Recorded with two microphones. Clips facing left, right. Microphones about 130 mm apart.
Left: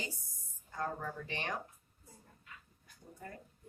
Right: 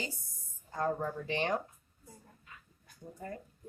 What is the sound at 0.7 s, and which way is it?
Speech, 30° right (ahead or behind).